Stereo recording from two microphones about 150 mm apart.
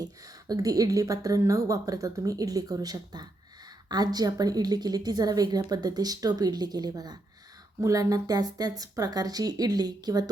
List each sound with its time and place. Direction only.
0.0 s speech: 25° right (ahead or behind)